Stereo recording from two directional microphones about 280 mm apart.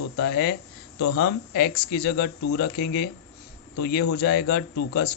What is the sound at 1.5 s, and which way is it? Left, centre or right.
Speech, left.